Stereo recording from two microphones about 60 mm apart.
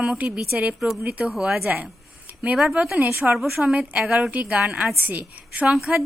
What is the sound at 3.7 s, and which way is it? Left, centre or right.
A woman's voice, centre.